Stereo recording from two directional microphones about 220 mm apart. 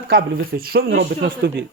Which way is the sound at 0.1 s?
45° right (ahead or behind).